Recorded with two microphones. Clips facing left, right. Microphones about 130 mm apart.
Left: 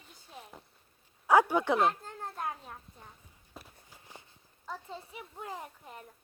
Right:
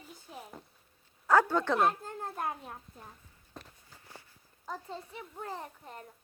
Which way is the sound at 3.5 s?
10° left (ahead or behind).